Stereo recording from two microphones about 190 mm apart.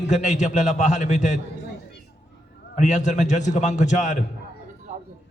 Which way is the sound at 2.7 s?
40° left (ahead or behind).